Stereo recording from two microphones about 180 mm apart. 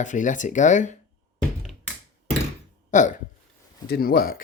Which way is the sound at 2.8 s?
45° left (ahead or behind).